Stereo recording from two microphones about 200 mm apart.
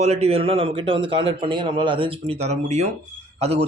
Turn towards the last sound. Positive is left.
turn(degrees=-30)  # may be behind; listen again after turning